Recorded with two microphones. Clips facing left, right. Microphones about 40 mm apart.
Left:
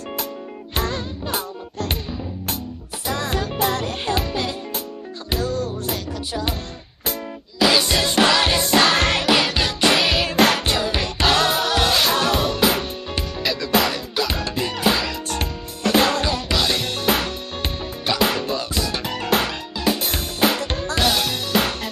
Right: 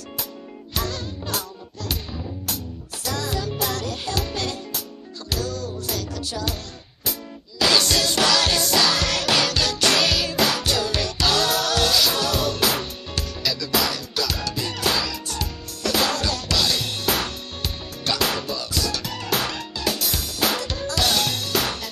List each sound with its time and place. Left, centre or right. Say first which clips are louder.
0.7 s music: left 3 dB; left
3.1 s music: left 3 dB; left
4.2 s music: left 3 dB; centre
5.3 s music: left 4 dB; left
7.5 s music: left 2 dB; centre; by 9.2 s left
9.2 s music: left 3 dB; left
10.2 s music: left 5 dB; left
10.6 s music: left 2 dB; left
14.7 s music: left 4 dB; left
15.0 s music: left 4 dB; left
18.0 s music: left 3 dB; centre
18.4 s music: left 3 dB; left
21.1 s music: left 1 dB; centre